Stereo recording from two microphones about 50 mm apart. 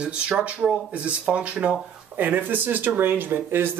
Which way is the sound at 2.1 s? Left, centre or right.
Right.